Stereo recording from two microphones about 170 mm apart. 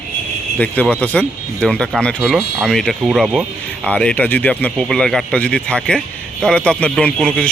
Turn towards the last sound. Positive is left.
turn(degrees=5)  # may be behind; listen again after turning